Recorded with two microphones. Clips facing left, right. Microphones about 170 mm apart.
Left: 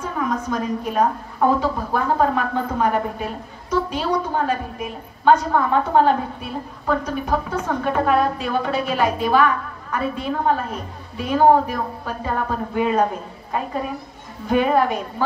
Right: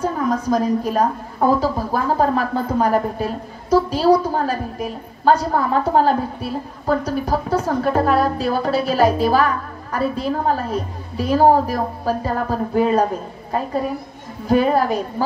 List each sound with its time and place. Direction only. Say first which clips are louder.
0.0 s a woman's voice: right 4 dB; 35° right (ahead or behind)